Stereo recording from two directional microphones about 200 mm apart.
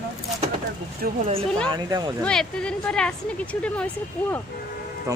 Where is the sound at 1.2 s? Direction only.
30° right (ahead or behind).